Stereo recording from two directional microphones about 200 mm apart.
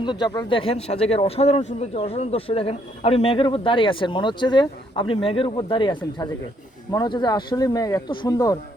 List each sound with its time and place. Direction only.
0.0 s a man's voice: 20° left (ahead or behind)